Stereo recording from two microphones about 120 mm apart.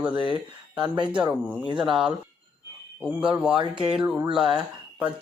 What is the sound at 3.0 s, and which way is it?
A man's voice, 10° right (ahead or behind).